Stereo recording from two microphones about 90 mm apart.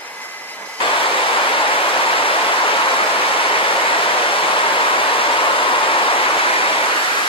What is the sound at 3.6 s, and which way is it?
Waterfall, 80° left.